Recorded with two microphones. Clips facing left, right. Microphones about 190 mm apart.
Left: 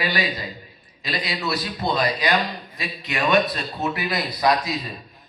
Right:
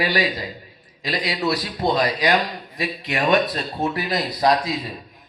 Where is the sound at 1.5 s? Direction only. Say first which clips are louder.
Right 4 dB; 40° right (ahead or behind).